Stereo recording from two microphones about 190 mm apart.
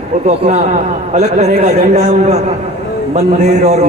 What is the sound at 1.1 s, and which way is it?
Speech, 35° right (ahead or behind).